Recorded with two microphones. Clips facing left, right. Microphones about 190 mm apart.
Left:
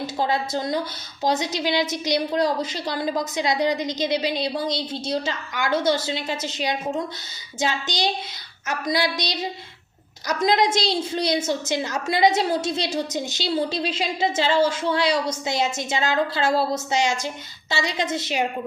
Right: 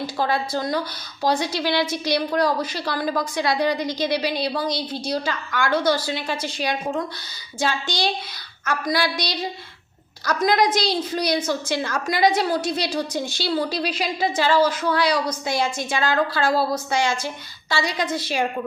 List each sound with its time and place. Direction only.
0.2 s a woman's voice: 20° left (ahead or behind)